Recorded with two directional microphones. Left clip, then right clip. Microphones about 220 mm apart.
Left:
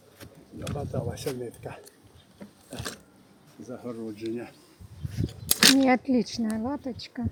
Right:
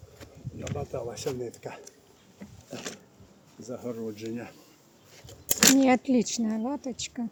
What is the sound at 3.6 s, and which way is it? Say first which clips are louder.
Speech: right 2 dB; 45° right (ahead or behind).